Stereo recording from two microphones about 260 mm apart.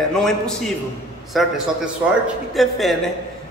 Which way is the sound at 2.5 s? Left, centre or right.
Centre.